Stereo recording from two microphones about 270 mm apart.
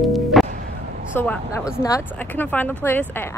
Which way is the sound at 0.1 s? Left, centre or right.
Centre.